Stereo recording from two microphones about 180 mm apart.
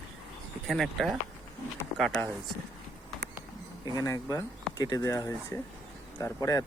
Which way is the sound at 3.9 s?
20° left (ahead or behind).